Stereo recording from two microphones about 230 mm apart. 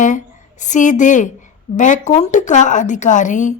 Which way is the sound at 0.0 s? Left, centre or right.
Left.